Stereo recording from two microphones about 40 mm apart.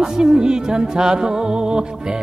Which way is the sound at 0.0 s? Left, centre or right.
Centre.